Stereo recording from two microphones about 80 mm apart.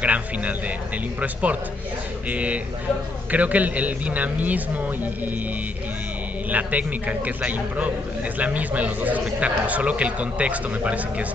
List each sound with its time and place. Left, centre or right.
0.0 s a man's voice: centre
6.5 s a man's voice: centre